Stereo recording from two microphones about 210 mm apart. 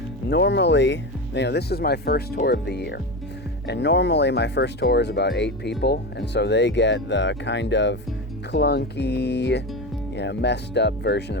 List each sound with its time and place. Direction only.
0.3 s speech: 55° left (ahead or behind)